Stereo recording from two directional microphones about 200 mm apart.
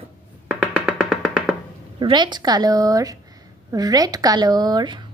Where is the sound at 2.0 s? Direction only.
20° right (ahead or behind).